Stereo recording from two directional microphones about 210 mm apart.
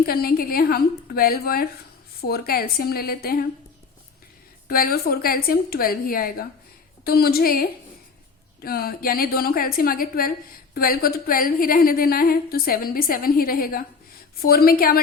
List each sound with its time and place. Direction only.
0.0 s a woman's voice: 45° left (ahead or behind)
4.7 s a woman's voice: 45° left (ahead or behind)